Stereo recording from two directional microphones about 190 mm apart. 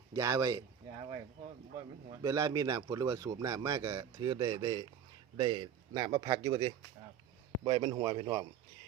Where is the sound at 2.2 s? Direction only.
20° right (ahead or behind).